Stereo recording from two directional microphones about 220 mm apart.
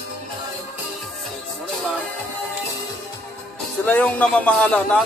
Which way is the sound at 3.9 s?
5° left (ahead or behind).